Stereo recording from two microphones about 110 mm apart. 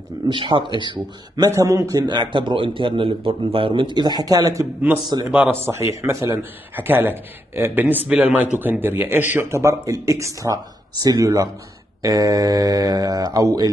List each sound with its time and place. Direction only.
0.3 s a man's voice: 45° right (ahead or behind)
1.4 s a man's voice: 30° right (ahead or behind)
5.1 s mantra: 40° right (ahead or behind)
5.7 s a man's voice: 25° right (ahead or behind)
12.0 s mantra: 30° right (ahead or behind)